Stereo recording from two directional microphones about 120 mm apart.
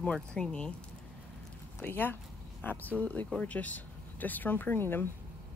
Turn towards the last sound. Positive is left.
turn(degrees=20)  # may be behind; listen again after turning